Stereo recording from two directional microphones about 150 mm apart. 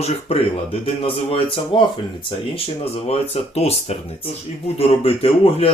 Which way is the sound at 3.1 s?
45° left (ahead or behind).